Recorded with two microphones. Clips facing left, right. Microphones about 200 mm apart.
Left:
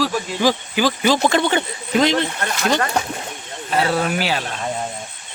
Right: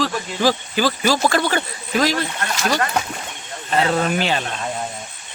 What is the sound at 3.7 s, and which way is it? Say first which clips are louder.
Speech: even; 5° left (ahead or behind).